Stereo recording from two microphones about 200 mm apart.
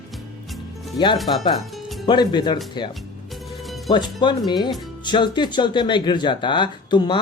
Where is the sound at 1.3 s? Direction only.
25° left (ahead or behind).